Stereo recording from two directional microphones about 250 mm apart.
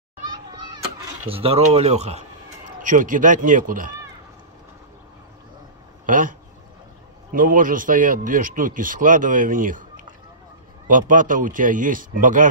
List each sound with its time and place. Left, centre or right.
1.3 s speech: right
6.0 s speech: right
7.3 s speech: right